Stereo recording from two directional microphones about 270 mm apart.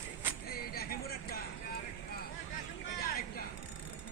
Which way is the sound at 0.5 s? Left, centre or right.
Left.